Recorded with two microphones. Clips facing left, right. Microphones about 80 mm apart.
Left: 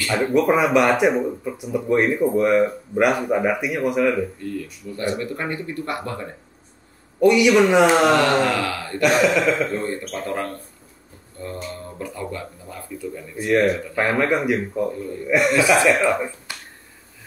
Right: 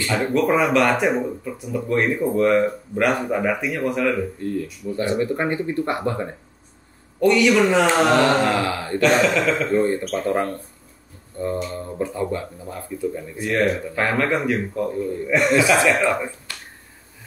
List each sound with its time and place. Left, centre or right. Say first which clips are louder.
0.3 s speech: left 1 dB; centre
4.6 s speech: right 5 dB; right
7.2 s speech: left 2 dB; centre
8.1 s speech: even; right
9.0 s speech: even; centre
9.7 s speech: right 6 dB; right
13.5 s speech: left 2 dB; centre
15.6 s speech: left 1 dB; left
15.9 s speech: left 1 dB; centre
16.5 s finger snapping: left 1 dB; centre